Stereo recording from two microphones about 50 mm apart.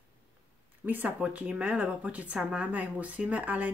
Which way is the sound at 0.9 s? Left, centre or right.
Right.